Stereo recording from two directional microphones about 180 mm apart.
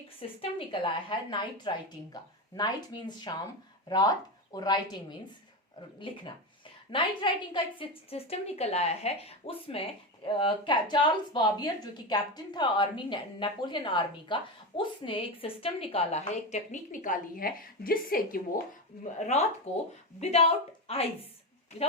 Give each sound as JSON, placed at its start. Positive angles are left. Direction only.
{"t": 0.2, "sound": "a woman's voice", "side_deg": 30}
{"t": 6.0, "sound": "a woman's voice", "side_deg": 30}
{"t": 19.2, "sound": "a woman's voice", "side_deg": 40}